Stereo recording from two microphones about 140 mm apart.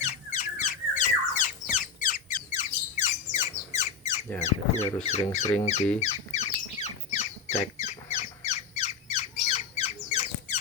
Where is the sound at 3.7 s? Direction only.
60° left (ahead or behind).